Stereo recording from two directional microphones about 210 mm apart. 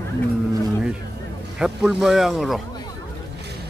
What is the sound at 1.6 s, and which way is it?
Speech, centre (ahead or behind).